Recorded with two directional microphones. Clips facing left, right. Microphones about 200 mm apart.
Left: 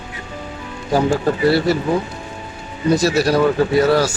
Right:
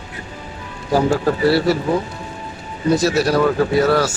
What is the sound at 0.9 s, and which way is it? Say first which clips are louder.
Speech: even; 5° right (ahead or behind).